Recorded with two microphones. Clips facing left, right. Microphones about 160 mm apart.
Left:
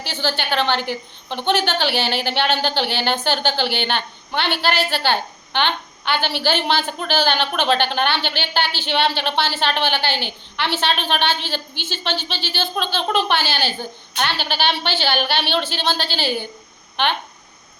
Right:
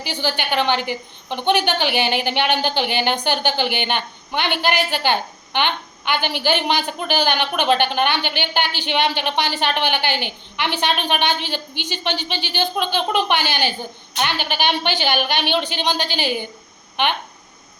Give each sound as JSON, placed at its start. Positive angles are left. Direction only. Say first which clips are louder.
{"t": 0.0, "sound": "a woman's voice", "louder": "even", "side_deg": -15}